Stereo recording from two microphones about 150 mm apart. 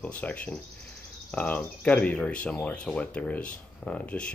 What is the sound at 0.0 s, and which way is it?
Speech, 10° left (ahead or behind).